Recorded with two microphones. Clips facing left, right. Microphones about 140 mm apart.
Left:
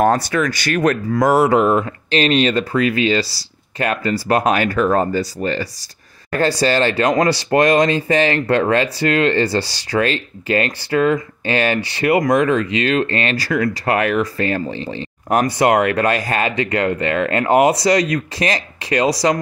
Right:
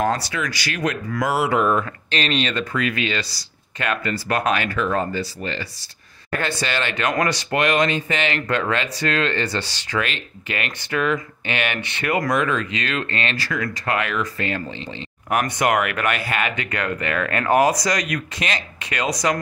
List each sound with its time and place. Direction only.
0.0 s speech: 55° left (ahead or behind)
1.6 s speech: 25° left (ahead or behind)